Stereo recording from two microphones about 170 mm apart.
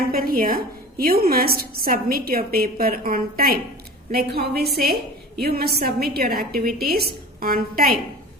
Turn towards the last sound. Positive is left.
turn(degrees=-60)  # may be behind; listen again after turning